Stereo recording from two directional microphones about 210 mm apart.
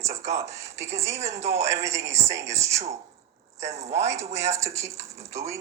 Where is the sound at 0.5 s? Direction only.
15° right (ahead or behind).